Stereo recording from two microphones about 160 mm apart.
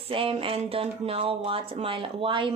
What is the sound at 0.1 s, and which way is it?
A woman's voice, 35° right (ahead or behind).